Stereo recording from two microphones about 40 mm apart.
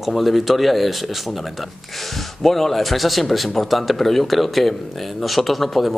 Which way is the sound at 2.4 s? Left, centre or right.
Centre.